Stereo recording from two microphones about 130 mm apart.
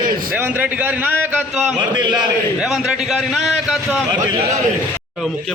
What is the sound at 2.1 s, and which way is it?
A man's voice, 5° right (ahead or behind).